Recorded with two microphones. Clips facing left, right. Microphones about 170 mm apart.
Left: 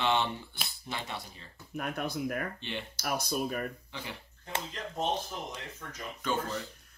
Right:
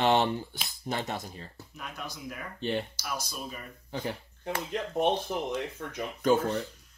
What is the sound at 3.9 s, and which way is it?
Speech, 40° right (ahead or behind).